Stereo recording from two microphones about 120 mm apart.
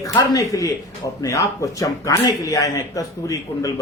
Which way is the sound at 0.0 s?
30° left (ahead or behind).